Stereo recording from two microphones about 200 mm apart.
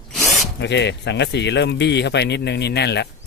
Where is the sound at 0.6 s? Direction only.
60° left (ahead or behind).